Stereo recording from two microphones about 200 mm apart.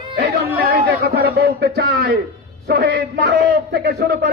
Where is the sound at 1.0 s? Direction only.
50° right (ahead or behind).